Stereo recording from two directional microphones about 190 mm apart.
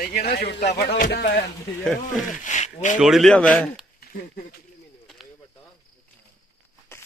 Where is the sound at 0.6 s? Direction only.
40° left (ahead or behind).